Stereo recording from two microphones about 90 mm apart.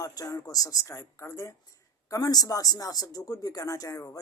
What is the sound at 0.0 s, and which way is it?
Speech, 45° left (ahead or behind).